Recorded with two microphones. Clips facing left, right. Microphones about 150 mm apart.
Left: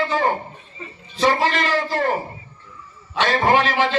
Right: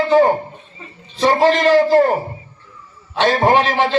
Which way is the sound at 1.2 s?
45° right (ahead or behind).